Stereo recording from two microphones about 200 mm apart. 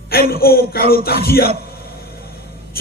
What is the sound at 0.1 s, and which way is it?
A man's voice, 50° left (ahead or behind).